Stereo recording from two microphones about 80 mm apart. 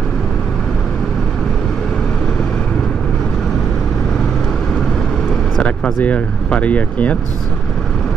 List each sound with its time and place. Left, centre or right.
5.9 s speech: centre